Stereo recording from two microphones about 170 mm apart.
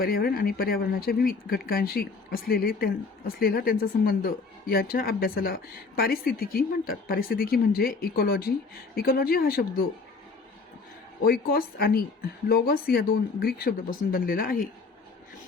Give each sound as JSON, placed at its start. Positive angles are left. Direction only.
{"t": 0.0, "sound": "speech", "side_deg": 60}
{"t": 11.3, "sound": "speech", "side_deg": 60}